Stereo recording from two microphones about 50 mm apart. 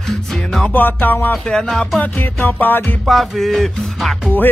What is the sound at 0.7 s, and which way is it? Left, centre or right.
Music, left.